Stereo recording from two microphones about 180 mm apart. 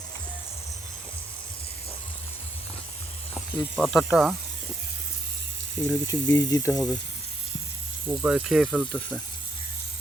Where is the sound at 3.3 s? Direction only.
5° right (ahead or behind).